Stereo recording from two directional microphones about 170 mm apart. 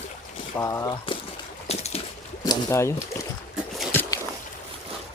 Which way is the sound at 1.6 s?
40° left (ahead or behind).